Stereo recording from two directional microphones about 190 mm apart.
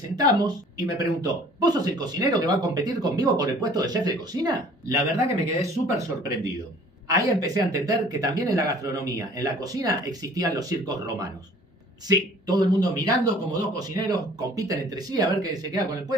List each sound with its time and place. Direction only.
0.2 s speech: 20° right (ahead or behind)
7.1 s speech: 20° right (ahead or behind)